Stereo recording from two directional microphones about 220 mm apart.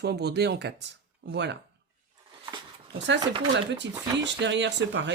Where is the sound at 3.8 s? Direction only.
55° right (ahead or behind).